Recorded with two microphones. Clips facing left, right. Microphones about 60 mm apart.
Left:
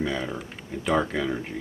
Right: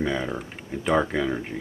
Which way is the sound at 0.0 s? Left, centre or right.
Centre.